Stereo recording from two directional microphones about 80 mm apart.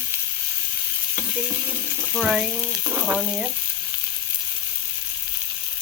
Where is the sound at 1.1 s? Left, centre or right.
Right.